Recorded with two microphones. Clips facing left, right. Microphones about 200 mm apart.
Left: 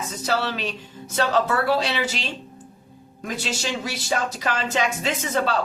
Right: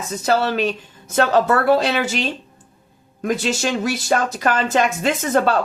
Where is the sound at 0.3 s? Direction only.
50° right (ahead or behind).